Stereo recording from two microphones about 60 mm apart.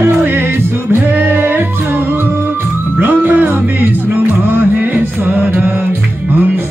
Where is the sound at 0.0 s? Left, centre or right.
Right.